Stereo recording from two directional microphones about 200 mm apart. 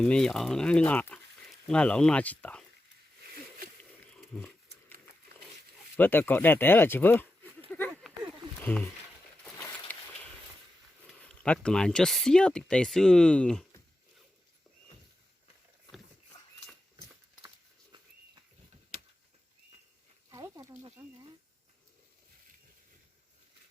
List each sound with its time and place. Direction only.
0.0 s speech: 5° left (ahead or behind)
4.4 s dog: 10° left (ahead or behind)
6.0 s speech: 10° left (ahead or behind)
7.7 s a sound: 5° left (ahead or behind)
8.6 s speech: 10° left (ahead or behind)
9.6 s a sound: 15° left (ahead or behind)
11.4 s speech: 5° left (ahead or behind)
20.3 s a sound: 15° right (ahead or behind)
21.0 s snake: 15° right (ahead or behind)